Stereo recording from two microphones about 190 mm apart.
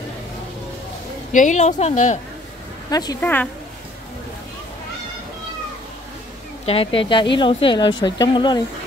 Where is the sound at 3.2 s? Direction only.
10° left (ahead or behind).